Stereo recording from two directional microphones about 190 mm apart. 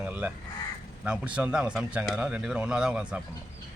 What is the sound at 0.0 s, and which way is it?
Crow, 5° right (ahead or behind).